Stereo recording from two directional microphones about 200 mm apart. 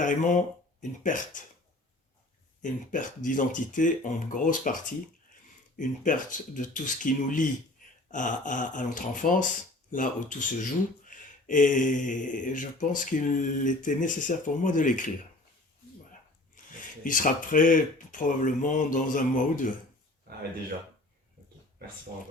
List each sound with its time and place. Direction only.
0.0 s speech: 40° left (ahead or behind)
2.6 s speech: 40° left (ahead or behind)
17.0 s speech: 40° left (ahead or behind)